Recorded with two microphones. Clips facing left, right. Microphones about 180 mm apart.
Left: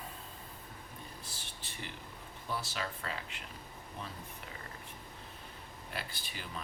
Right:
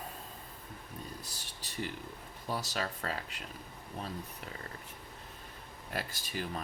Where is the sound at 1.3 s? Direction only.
40° right (ahead or behind).